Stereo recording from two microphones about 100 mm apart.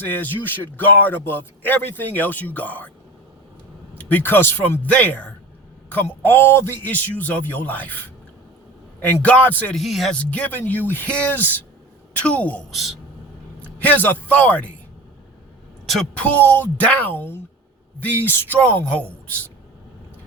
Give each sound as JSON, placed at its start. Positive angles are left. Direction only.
{"t": 0.0, "sound": "a man's voice", "side_deg": 20}
{"t": 3.9, "sound": "a man's voice", "side_deg": 20}
{"t": 9.0, "sound": "a man's voice", "side_deg": 15}
{"t": 9.7, "sound": "speech", "side_deg": 0}
{"t": 10.2, "sound": "a man's voice", "side_deg": 10}
{"t": 15.9, "sound": "speech", "side_deg": 5}
{"t": 16.3, "sound": "a man's voice", "side_deg": 20}